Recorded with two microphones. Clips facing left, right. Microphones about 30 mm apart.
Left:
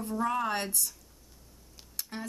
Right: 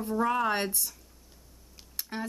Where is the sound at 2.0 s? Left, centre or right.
Centre.